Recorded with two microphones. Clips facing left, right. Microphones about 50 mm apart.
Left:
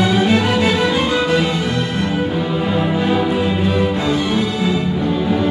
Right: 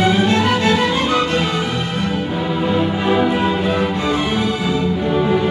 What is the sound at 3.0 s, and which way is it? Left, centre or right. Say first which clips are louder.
Music: right 3 dB; centre.